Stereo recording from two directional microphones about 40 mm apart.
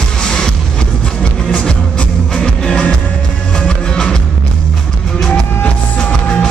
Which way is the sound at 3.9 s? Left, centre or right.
Centre.